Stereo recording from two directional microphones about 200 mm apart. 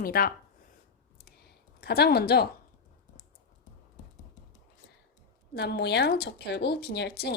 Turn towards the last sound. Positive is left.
turn(degrees=55)  # may be behind; listen again after turning